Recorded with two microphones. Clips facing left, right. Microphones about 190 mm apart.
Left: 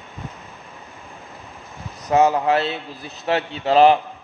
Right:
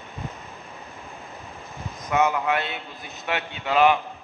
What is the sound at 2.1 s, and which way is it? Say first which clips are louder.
A man's voice: left 6 dB; 35° left (ahead or behind).